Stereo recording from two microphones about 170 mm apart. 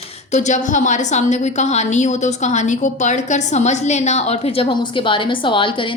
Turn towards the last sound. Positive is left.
turn(degrees=30)  # may be behind; listen again after turning